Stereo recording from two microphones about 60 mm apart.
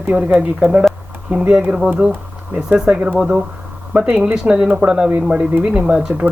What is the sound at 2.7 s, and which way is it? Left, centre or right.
Speech, centre.